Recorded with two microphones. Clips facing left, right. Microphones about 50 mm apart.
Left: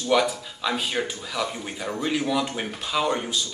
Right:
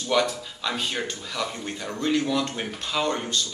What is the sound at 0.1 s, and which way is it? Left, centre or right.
Speech, centre.